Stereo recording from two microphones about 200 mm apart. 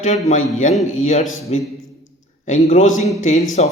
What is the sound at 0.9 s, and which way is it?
Speech, 35° left (ahead or behind).